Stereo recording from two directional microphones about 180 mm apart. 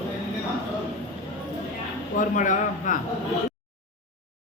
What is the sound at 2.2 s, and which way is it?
Speech, 45° left (ahead or behind).